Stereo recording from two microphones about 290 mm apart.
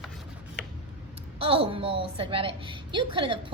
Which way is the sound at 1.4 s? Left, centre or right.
Centre.